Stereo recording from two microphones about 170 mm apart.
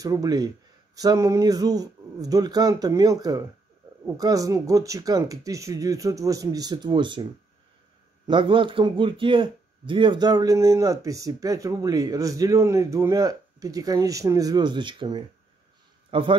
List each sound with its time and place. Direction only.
0.0 s speech: 20° right (ahead or behind)
8.3 s a man's voice: 30° right (ahead or behind)